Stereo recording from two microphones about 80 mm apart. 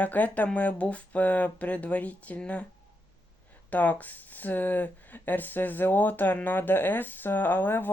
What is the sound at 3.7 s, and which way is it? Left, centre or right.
Speech, left.